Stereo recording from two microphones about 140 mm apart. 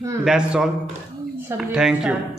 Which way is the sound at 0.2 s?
5° right (ahead or behind).